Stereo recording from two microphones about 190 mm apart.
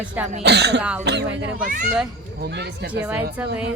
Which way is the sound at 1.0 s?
65° right (ahead or behind).